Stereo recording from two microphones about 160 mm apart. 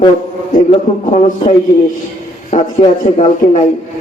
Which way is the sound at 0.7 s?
40° left (ahead or behind).